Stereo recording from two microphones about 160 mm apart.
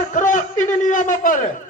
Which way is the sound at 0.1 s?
55° left (ahead or behind).